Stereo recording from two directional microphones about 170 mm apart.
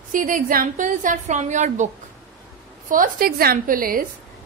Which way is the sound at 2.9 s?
55° right (ahead or behind).